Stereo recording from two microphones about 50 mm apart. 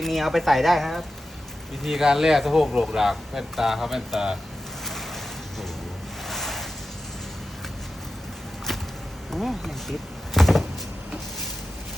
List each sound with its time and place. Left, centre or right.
0.0 s speech: centre
6.2 s ocean: centre
9.3 s speech: centre
10.3 s a sound: centre